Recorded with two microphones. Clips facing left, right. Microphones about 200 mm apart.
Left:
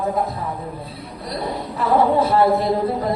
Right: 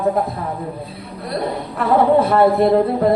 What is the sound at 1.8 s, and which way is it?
Speech, 60° right (ahead or behind).